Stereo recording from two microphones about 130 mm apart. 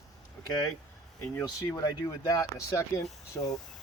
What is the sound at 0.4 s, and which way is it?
Speech, 30° left (ahead or behind).